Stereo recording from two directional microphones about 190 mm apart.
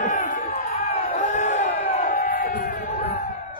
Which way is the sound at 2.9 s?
30° left (ahead or behind).